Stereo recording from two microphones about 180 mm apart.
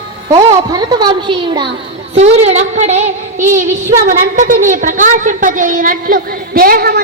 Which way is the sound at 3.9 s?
50° right (ahead or behind).